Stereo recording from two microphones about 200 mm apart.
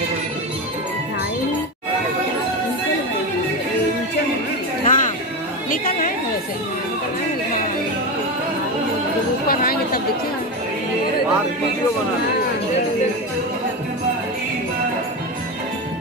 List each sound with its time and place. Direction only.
4.8 s a sound: 40° left (ahead or behind)
5.7 s chatter: 45° left (ahead or behind)
9.5 s chatter: 45° left (ahead or behind)